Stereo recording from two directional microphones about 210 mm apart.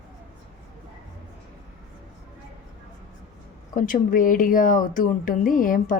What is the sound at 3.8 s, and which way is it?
Speech, 40° left (ahead or behind).